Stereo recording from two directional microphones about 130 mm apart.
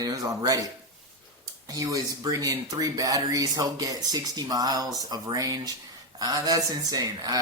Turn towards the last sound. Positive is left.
turn(degrees=-30)  # may be behind; listen again after turning